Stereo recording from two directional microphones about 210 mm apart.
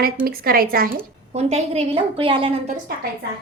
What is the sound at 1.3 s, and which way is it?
A woman's voice, 30° right (ahead or behind).